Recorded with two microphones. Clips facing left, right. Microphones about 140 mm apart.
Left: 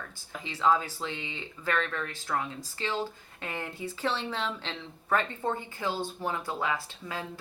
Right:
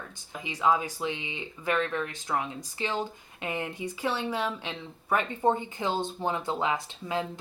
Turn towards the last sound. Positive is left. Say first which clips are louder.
# right 6 dB
turn(degrees=-20)  # may be behind; listen again after turning